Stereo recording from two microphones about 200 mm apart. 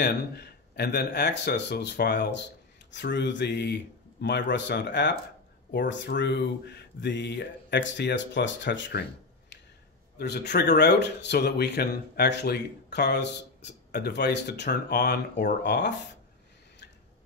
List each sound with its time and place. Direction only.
0.0 s speech: 55° left (ahead or behind)
10.1 s speech: 55° left (ahead or behind)